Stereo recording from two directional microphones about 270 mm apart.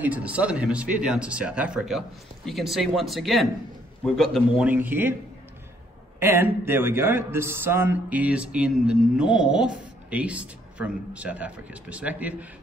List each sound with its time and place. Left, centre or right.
0.0 s speech: centre
6.1 s speech: centre